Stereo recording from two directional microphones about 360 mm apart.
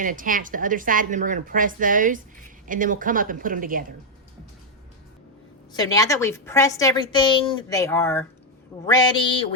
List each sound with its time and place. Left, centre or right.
0.0 s a woman's voice: right
5.7 s a woman's voice: centre